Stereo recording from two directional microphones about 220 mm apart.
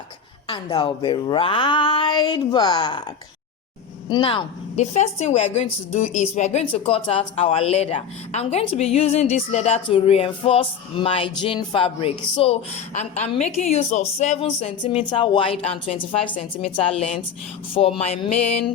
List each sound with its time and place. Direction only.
0.4 s a woman's voice: 25° left (ahead or behind)
4.1 s a woman's voice: 20° left (ahead or behind)